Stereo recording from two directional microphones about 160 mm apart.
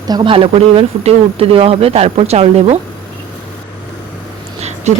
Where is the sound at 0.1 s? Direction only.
30° right (ahead or behind).